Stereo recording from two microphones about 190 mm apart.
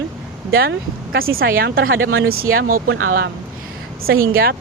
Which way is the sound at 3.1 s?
55° right (ahead or behind).